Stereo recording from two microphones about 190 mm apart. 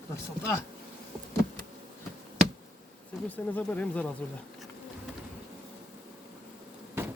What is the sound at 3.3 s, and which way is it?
Speech, 10° left (ahead or behind).